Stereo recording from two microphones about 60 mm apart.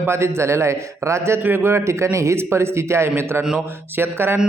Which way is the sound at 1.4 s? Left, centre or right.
Right.